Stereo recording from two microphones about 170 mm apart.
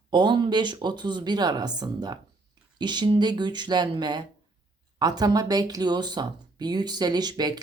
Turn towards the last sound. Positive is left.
turn(degrees=-25)  # may be behind; listen again after turning